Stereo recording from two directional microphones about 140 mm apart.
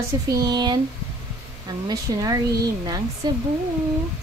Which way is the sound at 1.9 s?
25° right (ahead or behind).